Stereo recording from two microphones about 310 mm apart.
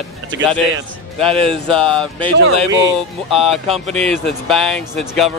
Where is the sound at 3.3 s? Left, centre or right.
Centre.